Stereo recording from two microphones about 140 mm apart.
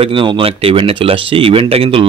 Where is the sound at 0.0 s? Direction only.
40° right (ahead or behind).